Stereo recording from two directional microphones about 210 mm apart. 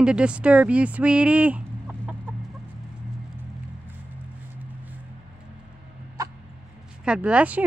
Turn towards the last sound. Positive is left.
turn(degrees=-5)  # may be behind; listen again after turning